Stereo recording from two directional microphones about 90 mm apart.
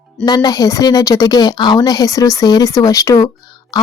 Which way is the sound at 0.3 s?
45° left (ahead or behind).